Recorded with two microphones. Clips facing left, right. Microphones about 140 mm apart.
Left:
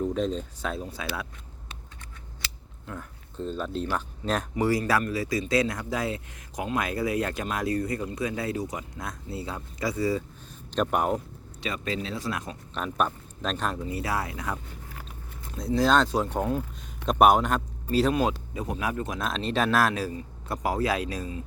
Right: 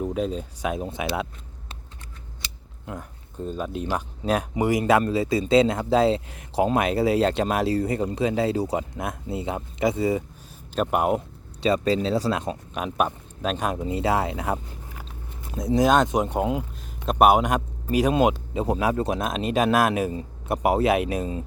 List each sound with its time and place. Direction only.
0.0 s speech: 10° right (ahead or behind)
2.8 s speech: 15° right (ahead or behind)
10.8 s speech: 10° right (ahead or behind)
11.6 s speech: 35° right (ahead or behind)
12.7 s speech: 10° right (ahead or behind)
13.7 s speech: 25° right (ahead or behind)
17.1 s speech: 5° right (ahead or behind); by 19.2 s 30° right (ahead or behind)
19.2 s speech: 15° right (ahead or behind)